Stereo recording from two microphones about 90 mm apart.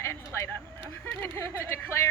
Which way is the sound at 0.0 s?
30° left (ahead or behind).